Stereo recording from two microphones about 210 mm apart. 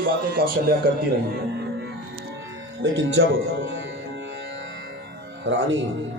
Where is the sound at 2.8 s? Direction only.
55° right (ahead or behind).